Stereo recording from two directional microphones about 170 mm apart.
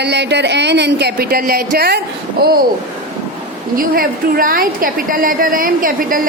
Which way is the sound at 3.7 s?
55° right (ahead or behind).